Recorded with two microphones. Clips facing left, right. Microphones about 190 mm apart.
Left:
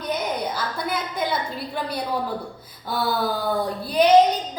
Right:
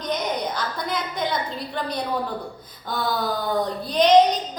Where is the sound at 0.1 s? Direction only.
5° left (ahead or behind).